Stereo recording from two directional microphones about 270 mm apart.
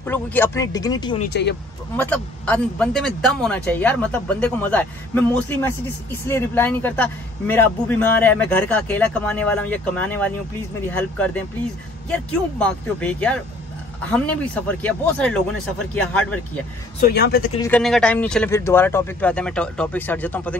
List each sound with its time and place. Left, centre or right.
0.0 s speech: centre
1.2 s speech: left
2.0 s a man's voice: centre
17.0 s speech: left
17.6 s a man's voice: centre